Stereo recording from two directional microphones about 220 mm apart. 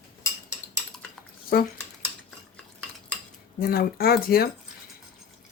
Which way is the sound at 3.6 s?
45° left (ahead or behind).